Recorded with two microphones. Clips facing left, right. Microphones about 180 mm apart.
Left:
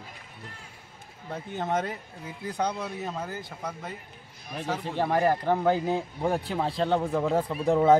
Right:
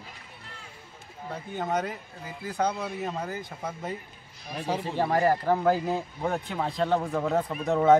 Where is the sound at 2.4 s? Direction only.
Centre (ahead or behind).